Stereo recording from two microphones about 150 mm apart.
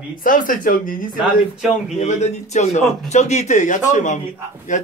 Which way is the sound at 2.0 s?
50° left (ahead or behind).